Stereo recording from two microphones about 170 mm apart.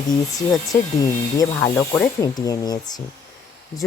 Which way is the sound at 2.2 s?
20° left (ahead or behind).